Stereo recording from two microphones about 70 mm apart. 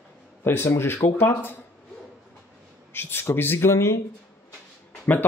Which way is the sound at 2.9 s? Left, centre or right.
Left.